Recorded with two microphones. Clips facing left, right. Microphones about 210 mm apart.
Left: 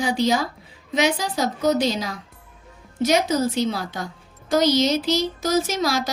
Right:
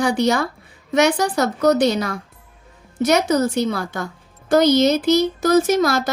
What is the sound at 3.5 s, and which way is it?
A woman's voice, 50° right (ahead or behind).